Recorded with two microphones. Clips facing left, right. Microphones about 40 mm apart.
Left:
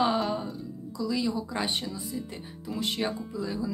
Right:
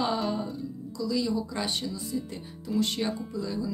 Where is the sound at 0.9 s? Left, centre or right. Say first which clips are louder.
Even; centre.